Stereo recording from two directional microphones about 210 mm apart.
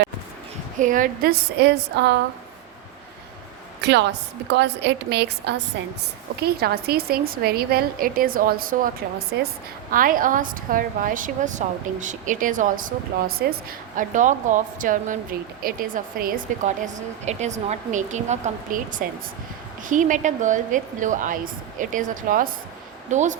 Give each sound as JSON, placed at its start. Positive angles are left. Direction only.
{"t": 0.8, "sound": "a woman's voice", "side_deg": -40}
{"t": 3.8, "sound": "a sound", "side_deg": -55}
{"t": 4.5, "sound": "a woman's voice", "side_deg": -55}